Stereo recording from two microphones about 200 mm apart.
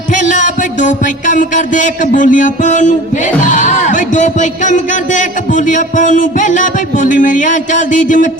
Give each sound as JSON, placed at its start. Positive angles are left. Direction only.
{"t": 0.1, "sound": "music", "side_deg": 40}
{"t": 3.4, "sound": "speech", "side_deg": 40}